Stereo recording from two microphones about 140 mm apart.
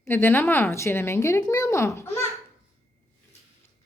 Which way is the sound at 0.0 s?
15° left (ahead or behind).